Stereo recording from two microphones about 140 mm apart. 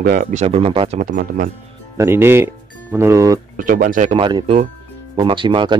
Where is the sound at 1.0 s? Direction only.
80° right.